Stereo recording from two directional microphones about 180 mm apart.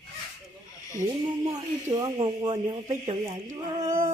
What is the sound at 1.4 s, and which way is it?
Speech, 20° right (ahead or behind).